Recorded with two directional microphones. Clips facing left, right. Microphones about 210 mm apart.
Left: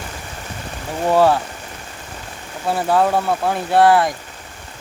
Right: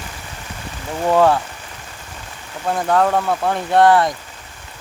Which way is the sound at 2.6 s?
10° left (ahead or behind).